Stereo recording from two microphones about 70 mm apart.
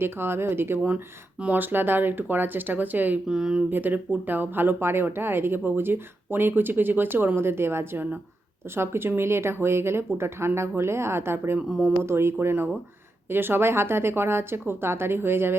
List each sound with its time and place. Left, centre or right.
0.0 s speech: right
1.4 s speech: right
3.2 s speech: centre
3.7 s speech: right